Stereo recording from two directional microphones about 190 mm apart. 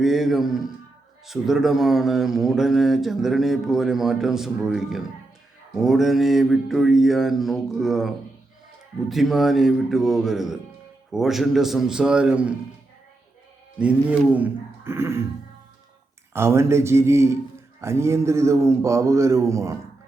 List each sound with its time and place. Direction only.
0.0 s mantra: centre (ahead or behind)
13.7 s speech: 5° right (ahead or behind)
16.3 s speech: 15° right (ahead or behind)